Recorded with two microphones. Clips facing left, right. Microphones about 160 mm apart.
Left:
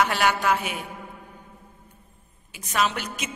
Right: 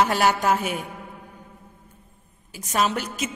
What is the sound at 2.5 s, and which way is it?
Speech, 40° right (ahead or behind).